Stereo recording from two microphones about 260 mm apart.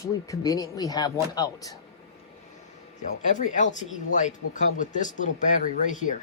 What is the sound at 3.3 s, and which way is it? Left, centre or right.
Speech, left.